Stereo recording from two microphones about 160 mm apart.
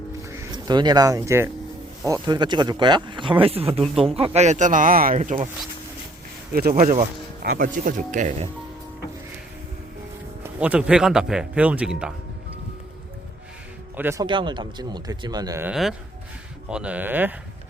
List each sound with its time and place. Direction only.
0.2 s speech: 25° right (ahead or behind); by 5.5 s 50° right (ahead or behind)
6.5 s speech: 70° right (ahead or behind); by 8.4 s 50° right (ahead or behind)
10.4 s speech: 10° right (ahead or behind)
13.9 s speech: 15° right (ahead or behind)
14.3 s speech: 30° right (ahead or behind)
15.6 s speech: 5° right (ahead or behind)